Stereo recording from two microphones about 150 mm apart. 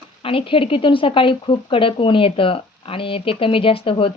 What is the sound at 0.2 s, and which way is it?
Speech, 35° left (ahead or behind).